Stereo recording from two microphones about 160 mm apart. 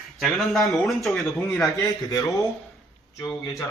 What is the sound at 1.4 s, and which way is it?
Speech, 15° left (ahead or behind).